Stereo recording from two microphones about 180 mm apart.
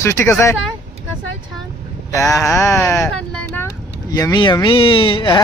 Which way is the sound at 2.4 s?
15° left (ahead or behind).